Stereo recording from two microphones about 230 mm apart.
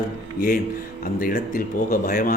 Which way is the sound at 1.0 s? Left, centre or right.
Left.